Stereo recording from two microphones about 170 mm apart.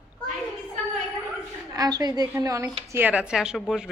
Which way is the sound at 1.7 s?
20° right (ahead or behind).